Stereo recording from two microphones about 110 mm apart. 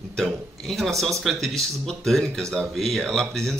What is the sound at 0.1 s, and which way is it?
A man's voice, 5° left (ahead or behind).